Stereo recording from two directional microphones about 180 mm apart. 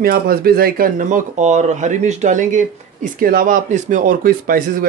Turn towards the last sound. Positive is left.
turn(degrees=-50)  # may be behind; listen again after turning